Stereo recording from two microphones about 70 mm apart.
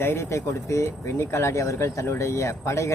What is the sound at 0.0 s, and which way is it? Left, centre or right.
Speech, left.